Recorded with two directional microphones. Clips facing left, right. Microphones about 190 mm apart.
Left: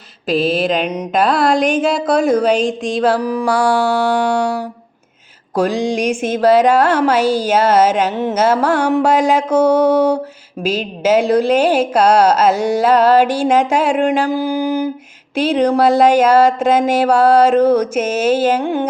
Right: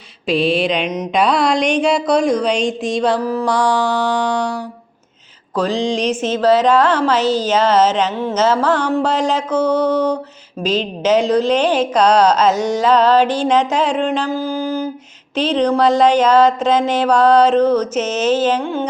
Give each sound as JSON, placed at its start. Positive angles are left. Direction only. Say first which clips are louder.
{"t": 0.3, "sound": "mantra", "louder": "left 1 dB", "side_deg": 0}
{"t": 5.5, "sound": "speech", "louder": "left 2 dB", "side_deg": 10}